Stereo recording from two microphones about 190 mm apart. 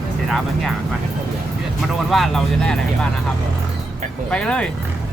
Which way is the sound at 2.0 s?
Centre (ahead or behind).